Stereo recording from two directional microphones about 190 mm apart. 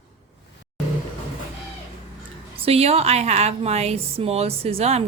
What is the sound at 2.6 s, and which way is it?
A woman's voice, 30° right (ahead or behind).